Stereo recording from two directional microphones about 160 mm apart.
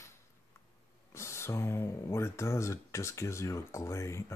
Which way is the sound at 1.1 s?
15° left (ahead or behind).